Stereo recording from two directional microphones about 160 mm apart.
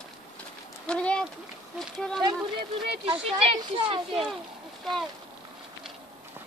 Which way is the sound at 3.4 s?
35° right (ahead or behind).